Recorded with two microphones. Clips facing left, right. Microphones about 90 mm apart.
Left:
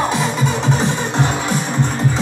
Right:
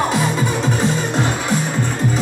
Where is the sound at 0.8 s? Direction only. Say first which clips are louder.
Even; 20° left (ahead or behind).